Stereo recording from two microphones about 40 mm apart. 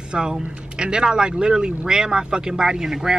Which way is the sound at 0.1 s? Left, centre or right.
Centre.